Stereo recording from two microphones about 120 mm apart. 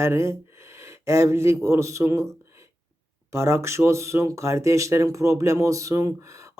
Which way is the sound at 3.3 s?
20° right (ahead or behind).